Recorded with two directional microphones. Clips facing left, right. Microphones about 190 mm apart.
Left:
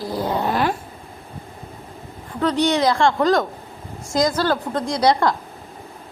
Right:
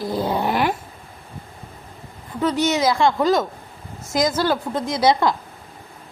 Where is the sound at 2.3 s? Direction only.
5° right (ahead or behind).